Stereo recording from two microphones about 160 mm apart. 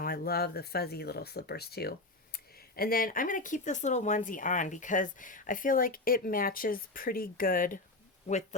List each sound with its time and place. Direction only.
0.0 s speech: 70° left (ahead or behind)